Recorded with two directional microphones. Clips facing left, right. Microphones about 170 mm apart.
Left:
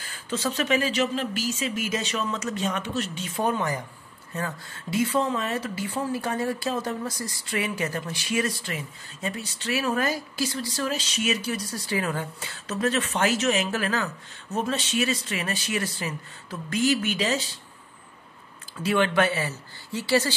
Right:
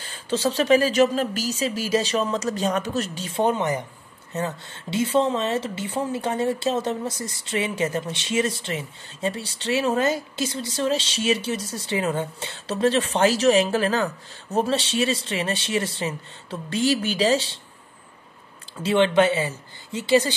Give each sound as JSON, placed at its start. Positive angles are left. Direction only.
{"t": 0.0, "sound": "speech", "side_deg": -30}
{"t": 3.3, "sound": "speech", "side_deg": -20}
{"t": 18.8, "sound": "speech", "side_deg": -25}